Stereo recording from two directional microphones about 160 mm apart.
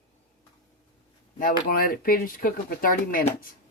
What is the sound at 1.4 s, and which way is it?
Speech, 60° left (ahead or behind).